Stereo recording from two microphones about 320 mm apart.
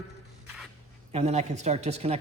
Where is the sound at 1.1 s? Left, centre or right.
Centre.